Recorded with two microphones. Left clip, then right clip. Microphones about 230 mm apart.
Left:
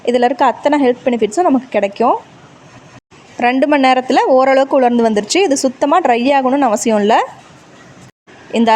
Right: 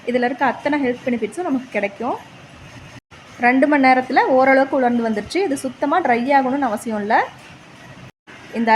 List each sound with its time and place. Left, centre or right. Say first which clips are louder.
0.0 s a woman's voice: left 7 dB; left
3.4 s a woman's voice: left 3 dB; left